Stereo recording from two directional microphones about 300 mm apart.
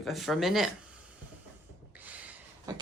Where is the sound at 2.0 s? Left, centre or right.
Centre.